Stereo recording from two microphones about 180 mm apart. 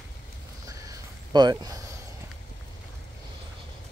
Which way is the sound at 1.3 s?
20° right (ahead or behind).